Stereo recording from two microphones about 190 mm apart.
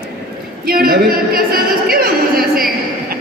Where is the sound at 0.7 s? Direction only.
50° right (ahead or behind).